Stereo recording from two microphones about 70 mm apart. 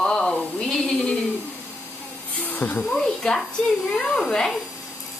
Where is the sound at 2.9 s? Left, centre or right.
Centre.